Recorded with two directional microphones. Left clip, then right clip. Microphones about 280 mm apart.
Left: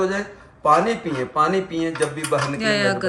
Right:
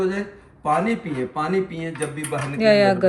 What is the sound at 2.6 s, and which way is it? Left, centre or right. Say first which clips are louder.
Speech: right 8 dB; centre.